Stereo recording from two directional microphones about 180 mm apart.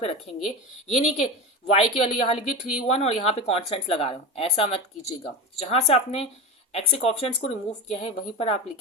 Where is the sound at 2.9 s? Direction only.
35° left (ahead or behind).